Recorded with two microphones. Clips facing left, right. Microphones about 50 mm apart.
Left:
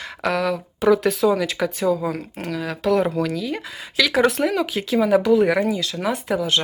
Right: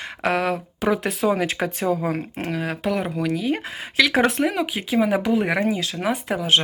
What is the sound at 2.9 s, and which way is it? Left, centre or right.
Speech, centre.